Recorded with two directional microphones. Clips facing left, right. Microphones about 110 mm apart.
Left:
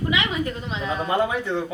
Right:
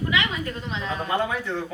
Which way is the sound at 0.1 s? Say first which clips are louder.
Left 3 dB; 20° left (ahead or behind).